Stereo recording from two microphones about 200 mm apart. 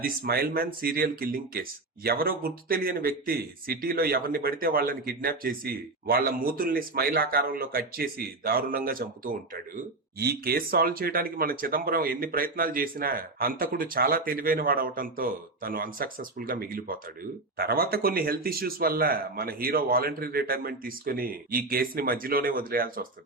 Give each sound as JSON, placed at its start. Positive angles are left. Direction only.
{"t": 0.0, "sound": "speech", "side_deg": -50}